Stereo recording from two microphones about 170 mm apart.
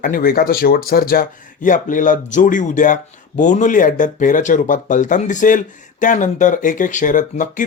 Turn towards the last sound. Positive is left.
turn(degrees=50)  # may be behind; listen again after turning